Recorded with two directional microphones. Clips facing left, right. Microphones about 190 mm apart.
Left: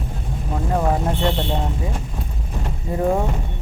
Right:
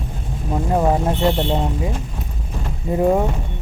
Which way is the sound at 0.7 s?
20° right (ahead or behind).